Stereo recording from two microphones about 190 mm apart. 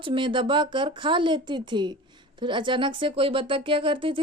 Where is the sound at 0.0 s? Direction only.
25° right (ahead or behind).